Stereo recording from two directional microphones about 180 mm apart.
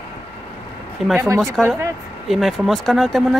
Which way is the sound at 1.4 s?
Centre (ahead or behind).